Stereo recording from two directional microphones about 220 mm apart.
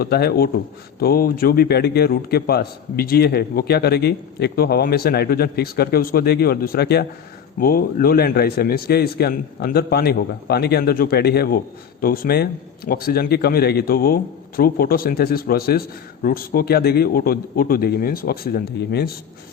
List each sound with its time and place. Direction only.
0.0 s a man's voice: 45° left (ahead or behind)